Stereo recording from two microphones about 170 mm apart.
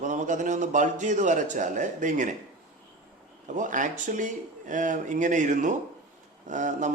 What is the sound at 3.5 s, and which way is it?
Speech, 50° right (ahead or behind).